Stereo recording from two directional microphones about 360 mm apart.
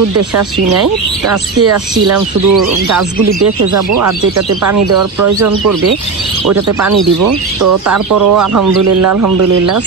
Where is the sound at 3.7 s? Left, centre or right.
Right.